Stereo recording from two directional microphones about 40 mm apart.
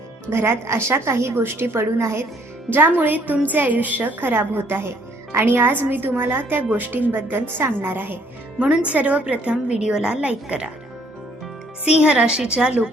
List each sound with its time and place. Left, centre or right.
0.3 s a woman's voice: right
2.6 s speech: right
6.7 s a woman's voice: right
8.5 s a woman's voice: right
11.9 s a woman's voice: right